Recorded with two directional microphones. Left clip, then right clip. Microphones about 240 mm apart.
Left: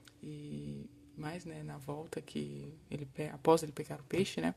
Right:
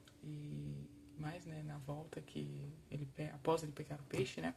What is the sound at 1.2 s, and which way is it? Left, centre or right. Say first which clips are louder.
Speech: left 5 dB; left.